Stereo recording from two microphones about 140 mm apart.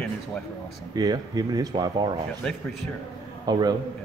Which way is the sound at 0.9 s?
30° right (ahead or behind).